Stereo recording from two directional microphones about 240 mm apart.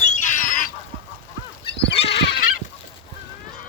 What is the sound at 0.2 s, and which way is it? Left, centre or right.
Goose, left.